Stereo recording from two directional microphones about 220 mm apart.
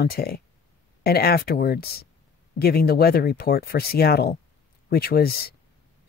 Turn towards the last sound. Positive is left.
turn(degrees=45)  # may be behind; listen again after turning